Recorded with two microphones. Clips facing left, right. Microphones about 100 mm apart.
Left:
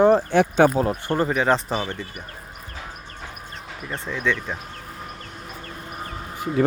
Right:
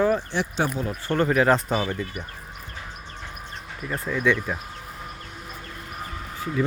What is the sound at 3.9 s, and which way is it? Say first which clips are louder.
Speech: right 2 dB; 5° right (ahead or behind).